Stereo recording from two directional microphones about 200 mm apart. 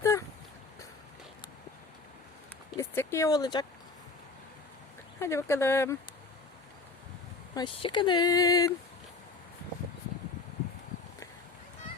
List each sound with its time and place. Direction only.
0.0 s a sound: 15° left (ahead or behind)
2.7 s speech: 10° left (ahead or behind)
5.2 s speech: 15° left (ahead or behind)
7.5 s speech: 25° left (ahead or behind)